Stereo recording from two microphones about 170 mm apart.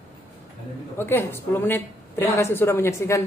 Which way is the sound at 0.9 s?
15° left (ahead or behind).